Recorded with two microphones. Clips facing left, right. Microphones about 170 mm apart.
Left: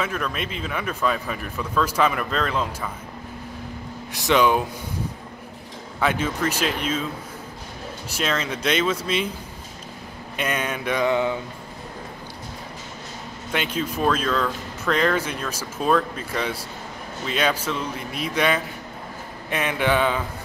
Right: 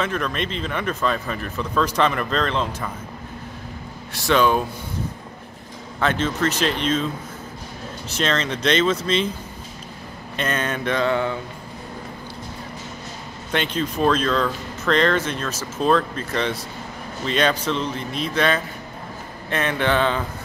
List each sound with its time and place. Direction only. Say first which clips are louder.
0.0 s speech: right 3 dB; 5° left (ahead or behind)
4.1 s speech: right 1 dB; 15° left (ahead or behind)
5.9 s speech: right 1 dB; 10° left (ahead or behind)
8.1 s speech: right 3 dB; 10° left (ahead or behind)
10.3 s speech: right 2 dB; 10° left (ahead or behind)
13.5 s speech: right 2 dB; 5° left (ahead or behind)